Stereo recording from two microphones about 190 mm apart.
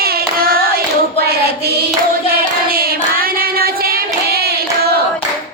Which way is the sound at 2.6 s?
50° right (ahead or behind).